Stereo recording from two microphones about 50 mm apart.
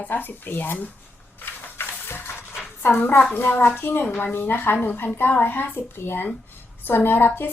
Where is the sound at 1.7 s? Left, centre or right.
Left.